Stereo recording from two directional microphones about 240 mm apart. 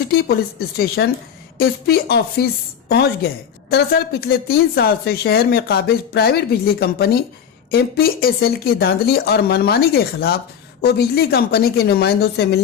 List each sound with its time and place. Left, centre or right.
0.1 s a woman's voice: left
3.7 s a woman's voice: left